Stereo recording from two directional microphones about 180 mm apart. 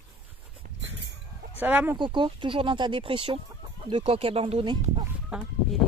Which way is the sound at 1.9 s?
25° right (ahead or behind).